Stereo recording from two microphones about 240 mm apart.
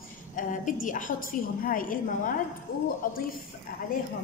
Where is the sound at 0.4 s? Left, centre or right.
Left.